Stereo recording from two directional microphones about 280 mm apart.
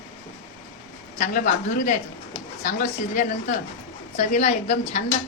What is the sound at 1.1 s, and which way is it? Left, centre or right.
Speech, left.